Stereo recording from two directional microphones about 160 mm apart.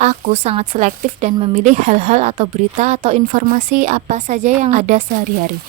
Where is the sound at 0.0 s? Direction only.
45° right (ahead or behind).